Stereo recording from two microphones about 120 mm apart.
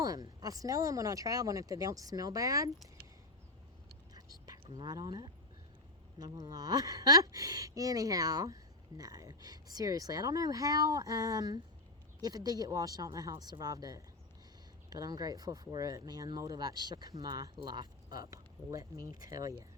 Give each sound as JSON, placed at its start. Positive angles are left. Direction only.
{"t": 0.0, "sound": "speech", "side_deg": -30}
{"t": 4.1, "sound": "whispering", "side_deg": -30}
{"t": 4.7, "sound": "speech", "side_deg": -35}